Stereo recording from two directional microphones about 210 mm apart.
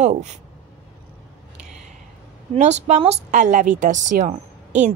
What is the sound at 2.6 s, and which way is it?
A woman's voice, 35° right (ahead or behind).